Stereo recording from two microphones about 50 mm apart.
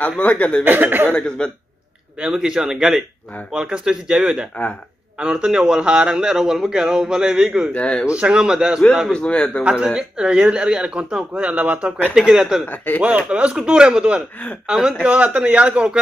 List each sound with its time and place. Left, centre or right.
0.2 s a man's voice: left
0.7 s speech: right
1.1 s a man's voice: left
2.1 s a man's voice: centre
5.2 s a man's voice: right
9.1 s a man's voice: centre
9.6 s speech: right
12.2 s a man's voice: centre
12.6 s speech: left
13.3 s a man's voice: right
15.0 s speech: right